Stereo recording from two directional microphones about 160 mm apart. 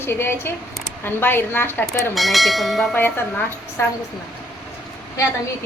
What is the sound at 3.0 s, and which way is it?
Speech, 15° left (ahead or behind).